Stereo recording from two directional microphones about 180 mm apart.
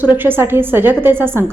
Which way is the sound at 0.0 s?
10° right (ahead or behind).